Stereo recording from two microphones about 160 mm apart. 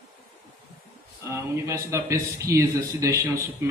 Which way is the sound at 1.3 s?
20° right (ahead or behind).